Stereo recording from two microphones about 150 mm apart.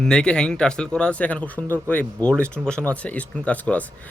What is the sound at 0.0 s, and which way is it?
Speech, 5° left (ahead or behind).